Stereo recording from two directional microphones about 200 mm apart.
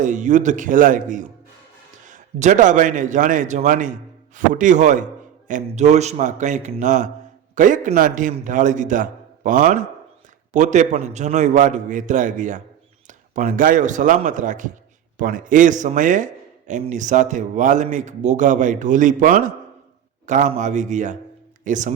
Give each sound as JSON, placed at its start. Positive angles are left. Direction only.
{"t": 0.0, "sound": "a man's voice", "side_deg": -40}